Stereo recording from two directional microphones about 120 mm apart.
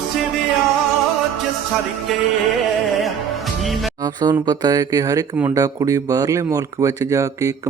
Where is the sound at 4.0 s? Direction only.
35° right (ahead or behind).